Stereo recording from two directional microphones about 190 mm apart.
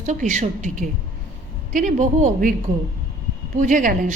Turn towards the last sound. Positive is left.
turn(degrees=-40)  # may be behind; listen again after turning